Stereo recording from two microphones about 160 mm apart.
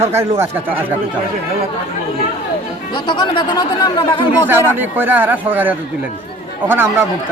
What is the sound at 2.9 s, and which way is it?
Speech, 30° left (ahead or behind).